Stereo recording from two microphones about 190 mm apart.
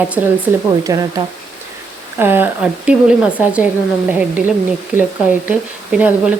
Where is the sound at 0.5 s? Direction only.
10° right (ahead or behind).